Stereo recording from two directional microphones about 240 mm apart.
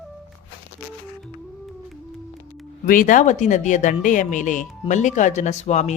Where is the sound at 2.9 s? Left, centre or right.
Left.